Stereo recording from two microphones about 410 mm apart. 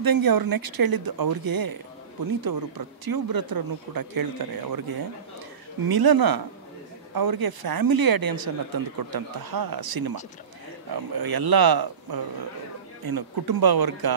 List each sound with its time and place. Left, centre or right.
0.0 s speech: right